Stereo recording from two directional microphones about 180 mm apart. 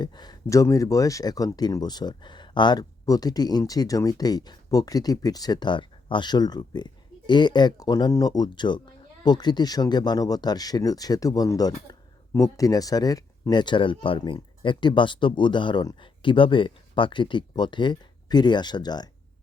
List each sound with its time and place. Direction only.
0.0 s speech: 25° left (ahead or behind)